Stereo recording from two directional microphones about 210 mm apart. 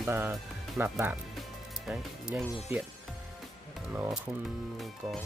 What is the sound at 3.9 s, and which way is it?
Speech, 5° right (ahead or behind).